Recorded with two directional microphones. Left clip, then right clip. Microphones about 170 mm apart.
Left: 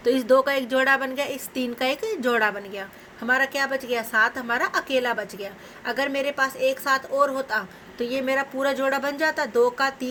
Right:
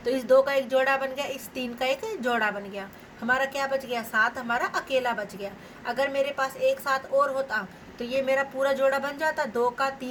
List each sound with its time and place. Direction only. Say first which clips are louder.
0.0 s a woman's voice: left 2 dB; 60° left (ahead or behind)